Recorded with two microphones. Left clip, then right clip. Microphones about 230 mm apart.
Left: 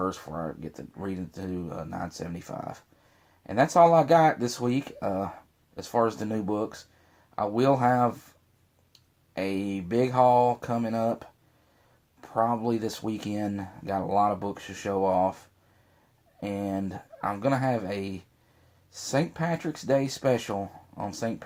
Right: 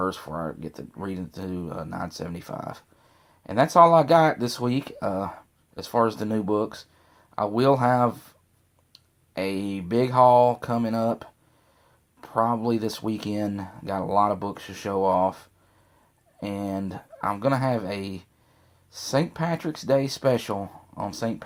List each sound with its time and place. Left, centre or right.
0.0 s speech: right
9.3 s speech: right
16.4 s speech: right